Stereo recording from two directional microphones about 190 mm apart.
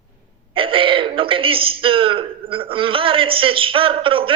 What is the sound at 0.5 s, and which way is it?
A man's voice, 30° right (ahead or behind).